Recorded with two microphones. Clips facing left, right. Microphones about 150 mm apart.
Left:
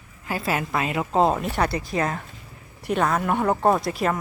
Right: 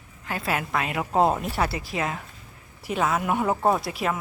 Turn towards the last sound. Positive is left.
turn(degrees=0)  # may be behind; listen again after turning